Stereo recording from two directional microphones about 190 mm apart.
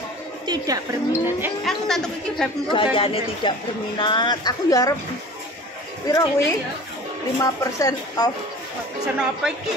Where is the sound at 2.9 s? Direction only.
30° left (ahead or behind).